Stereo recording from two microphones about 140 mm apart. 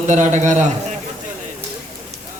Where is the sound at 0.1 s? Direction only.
60° right (ahead or behind).